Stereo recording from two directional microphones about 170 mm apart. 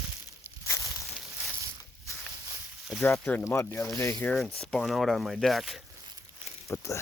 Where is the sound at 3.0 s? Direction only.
5° left (ahead or behind).